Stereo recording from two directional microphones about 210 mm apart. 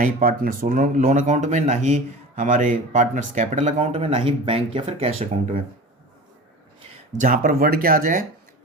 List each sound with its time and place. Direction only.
0.0 s speech: 40° right (ahead or behind)
7.2 s speech: 40° right (ahead or behind)